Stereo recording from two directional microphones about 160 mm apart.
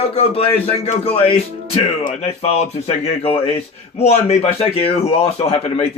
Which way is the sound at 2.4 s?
40° left (ahead or behind).